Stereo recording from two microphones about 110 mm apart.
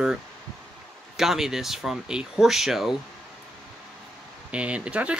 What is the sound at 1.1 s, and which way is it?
Speech, 5° right (ahead or behind).